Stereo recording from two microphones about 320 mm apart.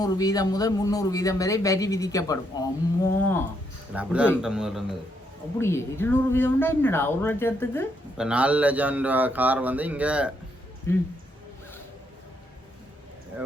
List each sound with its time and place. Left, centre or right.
0.0 s speech: centre
10.9 s speech: centre